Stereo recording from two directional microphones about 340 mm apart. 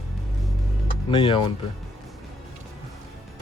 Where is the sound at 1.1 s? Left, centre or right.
Centre.